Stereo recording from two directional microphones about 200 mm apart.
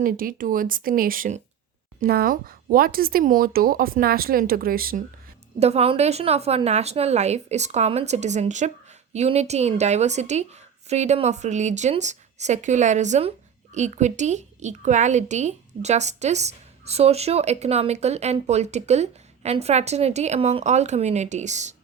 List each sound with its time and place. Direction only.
0.0 s speech: 45° right (ahead or behind)
5.5 s a woman's voice: 30° right (ahead or behind)